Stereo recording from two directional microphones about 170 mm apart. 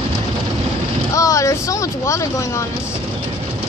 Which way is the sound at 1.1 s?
20° left (ahead or behind).